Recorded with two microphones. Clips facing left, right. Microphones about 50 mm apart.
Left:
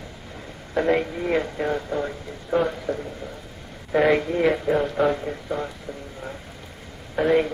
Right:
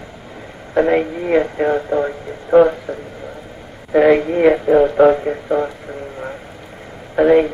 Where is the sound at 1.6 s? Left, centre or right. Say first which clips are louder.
Right 8 dB; right.